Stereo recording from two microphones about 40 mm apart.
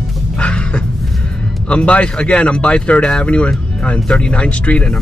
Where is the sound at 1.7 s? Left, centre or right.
Left.